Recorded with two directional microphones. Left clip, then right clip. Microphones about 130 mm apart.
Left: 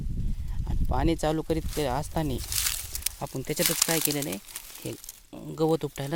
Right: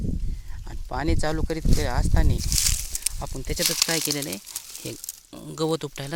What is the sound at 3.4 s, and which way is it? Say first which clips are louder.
Speech: right 3 dB; 20° left (ahead or behind).